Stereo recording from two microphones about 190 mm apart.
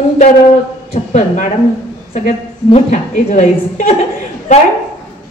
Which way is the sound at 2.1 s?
40° left (ahead or behind).